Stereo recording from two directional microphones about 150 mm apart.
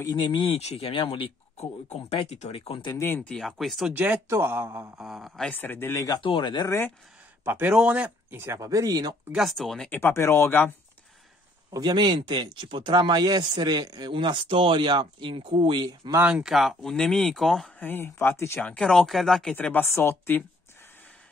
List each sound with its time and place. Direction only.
0.0 s speech: 30° left (ahead or behind)
2.9 s speech: 15° left (ahead or behind); by 4.9 s 15° right (ahead or behind)
4.9 s speech: centre (ahead or behind); by 6.7 s 30° left (ahead or behind)
7.4 s speech: 15° right (ahead or behind)
9.3 s speech: centre (ahead or behind)
9.9 s speech: 15° left (ahead or behind)
11.7 s speech: 30° right (ahead or behind)
16.2 s speech: 5° right (ahead or behind)
17.8 s speech: 15° left (ahead or behind)